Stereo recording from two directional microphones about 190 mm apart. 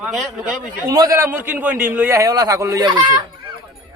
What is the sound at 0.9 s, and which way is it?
A man's voice, 20° right (ahead or behind).